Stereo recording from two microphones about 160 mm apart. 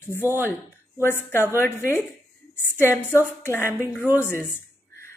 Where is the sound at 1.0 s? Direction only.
15° left (ahead or behind).